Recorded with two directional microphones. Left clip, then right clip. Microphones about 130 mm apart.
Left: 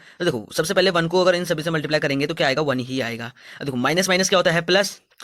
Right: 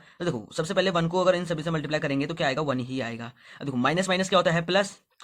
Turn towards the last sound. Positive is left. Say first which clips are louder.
# left 5 dB
turn(degrees=45)  # may be behind; listen again after turning